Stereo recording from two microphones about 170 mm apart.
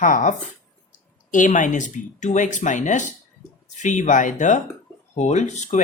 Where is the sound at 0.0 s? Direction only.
50° left (ahead or behind).